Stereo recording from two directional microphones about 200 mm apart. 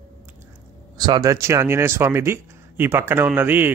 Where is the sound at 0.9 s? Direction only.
20° right (ahead or behind).